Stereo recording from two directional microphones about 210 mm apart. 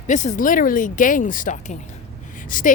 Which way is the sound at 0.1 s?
35° left (ahead or behind).